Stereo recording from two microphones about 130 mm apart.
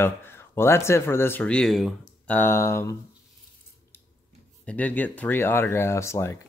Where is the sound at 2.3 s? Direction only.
15° left (ahead or behind).